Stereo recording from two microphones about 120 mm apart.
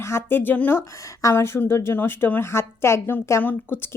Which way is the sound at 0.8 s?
25° left (ahead or behind).